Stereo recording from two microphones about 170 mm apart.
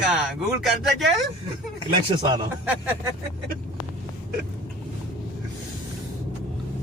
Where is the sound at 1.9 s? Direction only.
25° right (ahead or behind).